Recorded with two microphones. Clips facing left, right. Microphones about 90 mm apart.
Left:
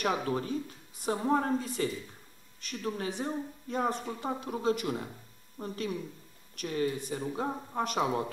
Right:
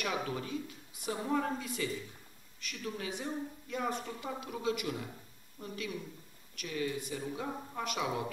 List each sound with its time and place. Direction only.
0.0 s a woman's voice: 40° left (ahead or behind)